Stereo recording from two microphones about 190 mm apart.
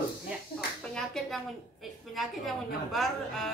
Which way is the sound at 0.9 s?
5° left (ahead or behind).